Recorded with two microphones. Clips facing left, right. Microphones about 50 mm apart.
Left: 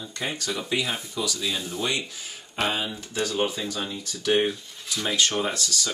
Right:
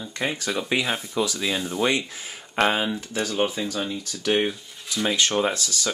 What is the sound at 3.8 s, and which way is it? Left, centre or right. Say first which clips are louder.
Speech: right 2 dB; centre.